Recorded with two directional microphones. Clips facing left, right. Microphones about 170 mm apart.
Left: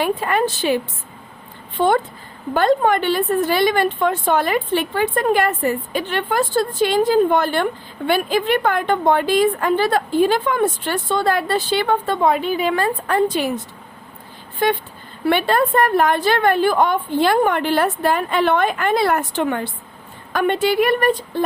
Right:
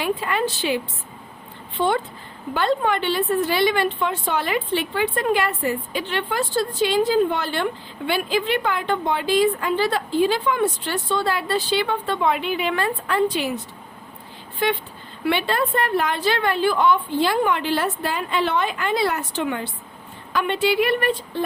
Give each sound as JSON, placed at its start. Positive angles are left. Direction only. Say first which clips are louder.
{"t": 0.0, "sound": "a woman's voice", "louder": "left 4 dB", "side_deg": 50}
{"t": 1.8, "sound": "a woman's voice", "louder": "left 4 dB", "side_deg": 45}
{"t": 14.6, "sound": "a woman's voice", "louder": "left 4 dB", "side_deg": 45}